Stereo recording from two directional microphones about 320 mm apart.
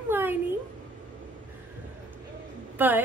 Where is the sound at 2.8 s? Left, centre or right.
Centre.